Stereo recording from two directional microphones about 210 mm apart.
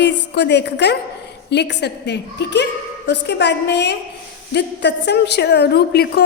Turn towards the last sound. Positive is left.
turn(degrees=50)  # may be behind; listen again after turning